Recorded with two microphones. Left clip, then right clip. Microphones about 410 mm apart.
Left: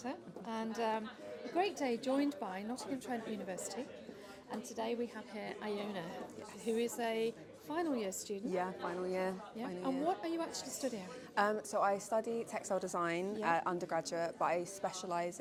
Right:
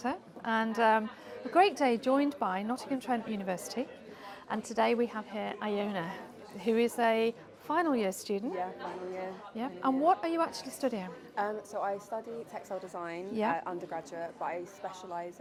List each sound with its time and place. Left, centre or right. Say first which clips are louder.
0.0 s a sound: right 9 dB; right
1.5 s a woman's voice: right 10 dB; right
9.6 s a woman's voice: right 11 dB; right
11.3 s a woman's voice: left 1 dB; left